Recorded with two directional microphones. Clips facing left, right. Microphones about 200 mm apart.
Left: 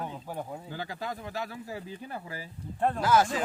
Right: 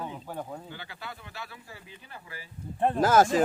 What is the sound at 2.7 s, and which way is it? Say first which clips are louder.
Speech: right 2 dB; 20° right (ahead or behind).